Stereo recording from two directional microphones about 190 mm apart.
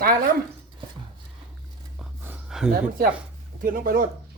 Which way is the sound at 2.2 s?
5° right (ahead or behind).